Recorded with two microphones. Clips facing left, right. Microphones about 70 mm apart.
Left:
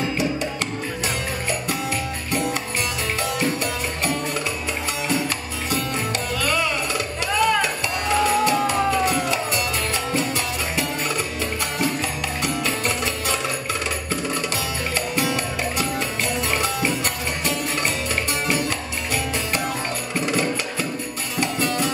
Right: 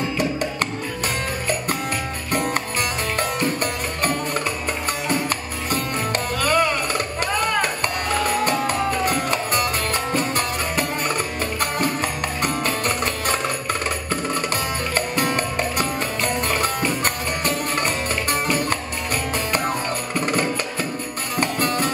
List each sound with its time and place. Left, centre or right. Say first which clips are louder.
2.3 s music: right 2 dB; right
5.7 s music: right 1 dB; right
15.0 s music: right 2 dB; right
20.2 s music: even; right